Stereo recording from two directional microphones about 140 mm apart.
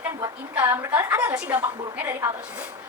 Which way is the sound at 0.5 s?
15° right (ahead or behind).